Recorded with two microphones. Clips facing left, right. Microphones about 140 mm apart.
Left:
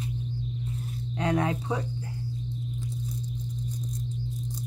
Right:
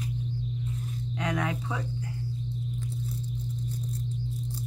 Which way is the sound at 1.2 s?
30° left (ahead or behind).